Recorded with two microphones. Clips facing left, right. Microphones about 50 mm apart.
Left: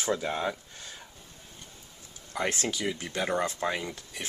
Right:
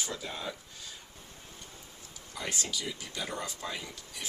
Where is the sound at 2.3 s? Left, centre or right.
Left.